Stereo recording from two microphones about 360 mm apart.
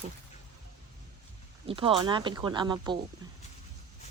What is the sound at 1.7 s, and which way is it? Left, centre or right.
Speech, centre.